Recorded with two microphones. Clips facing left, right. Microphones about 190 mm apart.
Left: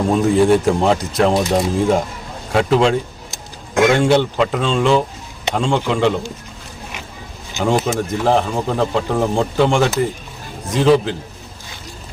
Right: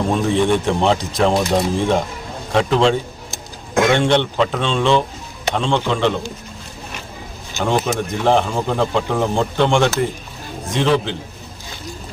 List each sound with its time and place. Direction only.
0.1 s speech: 5° left (ahead or behind)
7.6 s speech: 5° left (ahead or behind)